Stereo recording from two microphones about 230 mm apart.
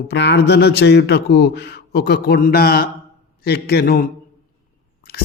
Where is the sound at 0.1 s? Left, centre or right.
Left.